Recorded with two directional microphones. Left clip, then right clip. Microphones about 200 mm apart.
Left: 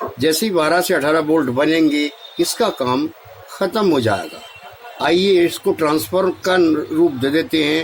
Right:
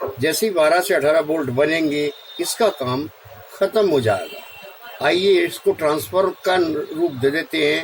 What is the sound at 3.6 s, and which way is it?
Speech, 45° left (ahead or behind).